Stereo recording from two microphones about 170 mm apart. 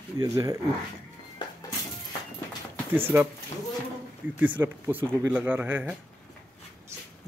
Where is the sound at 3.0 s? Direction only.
15° right (ahead or behind).